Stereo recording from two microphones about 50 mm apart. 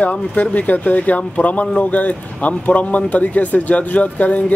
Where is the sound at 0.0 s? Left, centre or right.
Left.